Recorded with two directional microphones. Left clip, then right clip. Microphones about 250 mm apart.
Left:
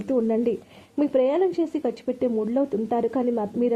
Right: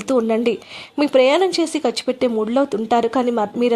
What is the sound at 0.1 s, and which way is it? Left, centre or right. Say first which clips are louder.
Speech: right 5 dB; centre.